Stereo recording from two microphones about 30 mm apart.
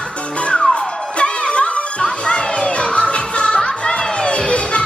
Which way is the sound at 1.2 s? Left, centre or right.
Left.